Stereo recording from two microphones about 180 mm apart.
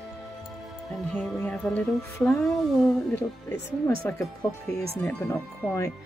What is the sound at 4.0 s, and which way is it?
Speech, 10° left (ahead or behind).